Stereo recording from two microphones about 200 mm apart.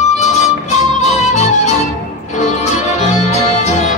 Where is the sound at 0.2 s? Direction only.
35° left (ahead or behind).